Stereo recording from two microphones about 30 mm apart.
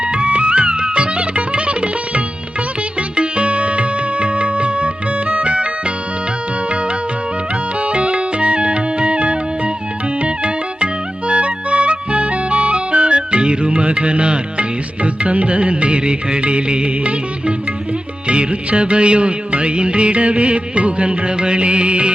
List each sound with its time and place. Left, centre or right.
0.0 s music: right
7.8 s music: right